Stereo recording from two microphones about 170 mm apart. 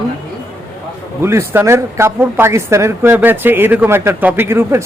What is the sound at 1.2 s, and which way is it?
Speech, 15° right (ahead or behind).